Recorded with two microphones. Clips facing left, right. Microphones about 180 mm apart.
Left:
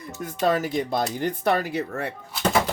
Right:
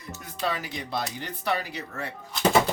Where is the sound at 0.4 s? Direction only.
50° left (ahead or behind).